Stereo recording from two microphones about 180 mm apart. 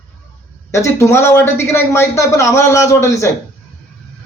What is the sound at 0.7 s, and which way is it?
A man's voice, 15° left (ahead or behind).